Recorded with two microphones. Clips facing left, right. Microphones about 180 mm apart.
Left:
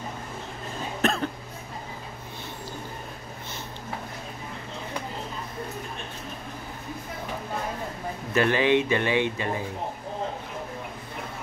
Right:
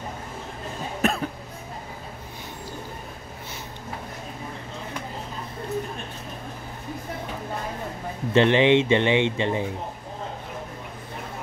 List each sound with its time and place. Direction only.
1.0 s cough: 10° right (ahead or behind)
8.3 s a man's voice: 25° right (ahead or behind)